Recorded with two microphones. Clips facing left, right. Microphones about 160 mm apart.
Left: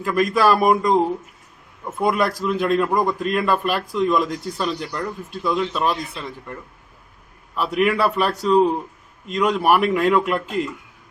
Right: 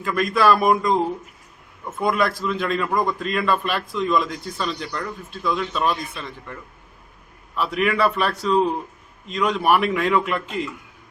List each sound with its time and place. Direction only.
0.0 s speech: 5° left (ahead or behind)
2.0 s speech: 5° left (ahead or behind)